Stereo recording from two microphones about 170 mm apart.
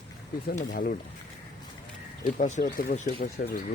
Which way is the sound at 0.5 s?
55° left (ahead or behind).